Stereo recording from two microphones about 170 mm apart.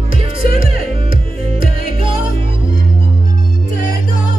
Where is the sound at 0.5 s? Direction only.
55° left (ahead or behind).